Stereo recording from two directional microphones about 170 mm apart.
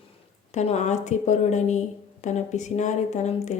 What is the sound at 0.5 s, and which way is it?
Speech, 40° left (ahead or behind).